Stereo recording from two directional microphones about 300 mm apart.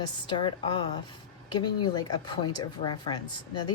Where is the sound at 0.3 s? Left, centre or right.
Centre.